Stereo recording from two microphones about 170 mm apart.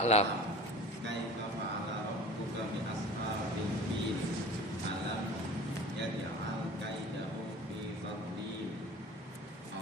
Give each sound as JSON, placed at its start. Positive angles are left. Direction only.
{"t": 0.0, "sound": "a man's voice", "side_deg": 40}